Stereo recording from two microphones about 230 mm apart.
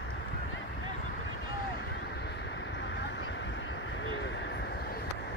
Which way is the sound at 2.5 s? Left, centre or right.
Left.